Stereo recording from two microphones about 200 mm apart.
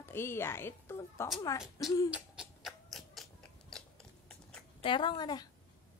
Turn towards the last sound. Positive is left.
turn(degrees=20)  # may be behind; listen again after turning